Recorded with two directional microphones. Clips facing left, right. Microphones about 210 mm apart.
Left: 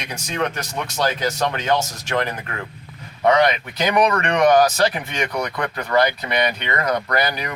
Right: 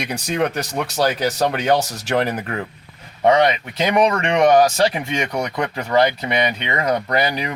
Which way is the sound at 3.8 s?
25° right (ahead or behind).